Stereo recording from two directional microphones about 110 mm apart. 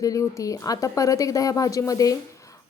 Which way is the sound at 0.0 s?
30° left (ahead or behind).